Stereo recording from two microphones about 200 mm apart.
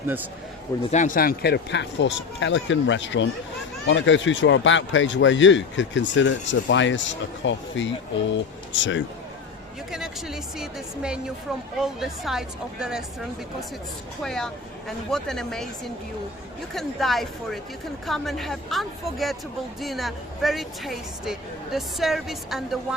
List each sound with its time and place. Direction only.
0.9 s a man's voice: 40° left (ahead or behind); by 9.0 s 65° left (ahead or behind)
9.9 s speech: centre (ahead or behind)
14.2 s speech: 5° left (ahead or behind)